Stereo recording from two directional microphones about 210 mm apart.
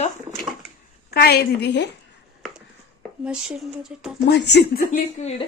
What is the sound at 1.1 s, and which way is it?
Speech, 50° left (ahead or behind).